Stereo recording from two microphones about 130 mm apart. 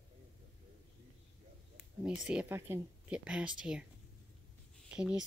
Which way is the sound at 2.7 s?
20° right (ahead or behind).